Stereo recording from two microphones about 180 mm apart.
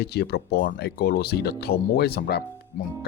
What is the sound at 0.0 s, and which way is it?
Speech, 65° left (ahead or behind).